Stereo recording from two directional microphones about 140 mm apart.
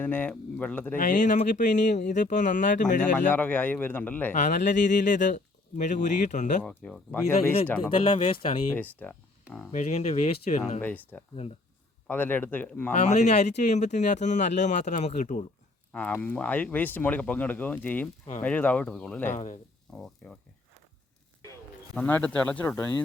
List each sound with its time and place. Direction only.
0.0 s speech: 10° left (ahead or behind)
0.9 s speech: 65° left (ahead or behind)
3.2 s speech: 10° left (ahead or behind)
4.4 s speech: 60° left (ahead or behind)
6.6 s speech: 5° left (ahead or behind)
7.9 s speech: 40° left (ahead or behind)
8.7 s speech: 10° left (ahead or behind)
9.7 s speech: 55° left (ahead or behind)
10.8 s speech: 10° left (ahead or behind)
13.1 s speech: 55° left (ahead or behind)
15.9 s speech: 10° left (ahead or behind)
19.3 s speech: 60° left (ahead or behind)
19.9 s speech: 5° left (ahead or behind)
21.9 s speech: 10° left (ahead or behind)